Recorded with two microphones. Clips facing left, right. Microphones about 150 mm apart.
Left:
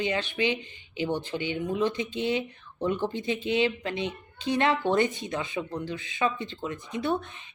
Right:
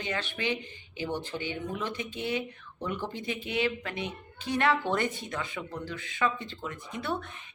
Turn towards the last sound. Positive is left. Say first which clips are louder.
# left 5 dB
turn(degrees=20)  # may be behind; listen again after turning